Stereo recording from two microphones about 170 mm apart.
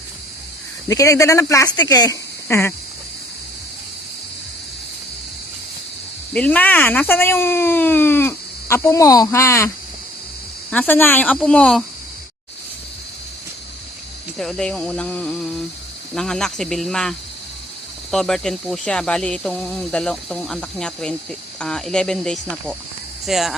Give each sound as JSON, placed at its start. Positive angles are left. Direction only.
{"t": 0.9, "sound": "speech", "side_deg": 20}
{"t": 6.3, "sound": "speech", "side_deg": 5}
{"t": 14.3, "sound": "speech", "side_deg": 5}